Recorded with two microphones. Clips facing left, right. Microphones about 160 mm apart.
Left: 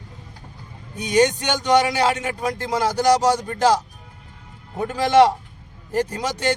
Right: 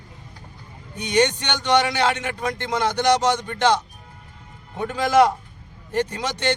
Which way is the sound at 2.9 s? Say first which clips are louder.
Left 2 dB; centre (ahead or behind).